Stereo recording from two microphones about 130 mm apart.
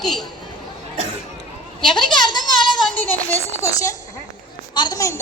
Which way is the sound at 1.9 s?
35° left (ahead or behind).